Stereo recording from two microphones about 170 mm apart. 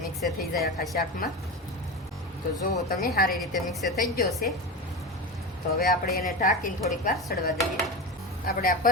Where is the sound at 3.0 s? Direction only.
60° left (ahead or behind).